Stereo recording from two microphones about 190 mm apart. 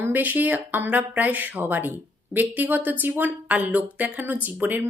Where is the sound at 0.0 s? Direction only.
10° right (ahead or behind).